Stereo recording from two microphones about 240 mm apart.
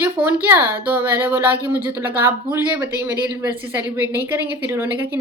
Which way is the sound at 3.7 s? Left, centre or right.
Centre.